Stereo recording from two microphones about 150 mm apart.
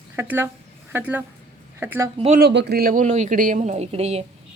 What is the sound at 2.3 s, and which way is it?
Speech, 90° right.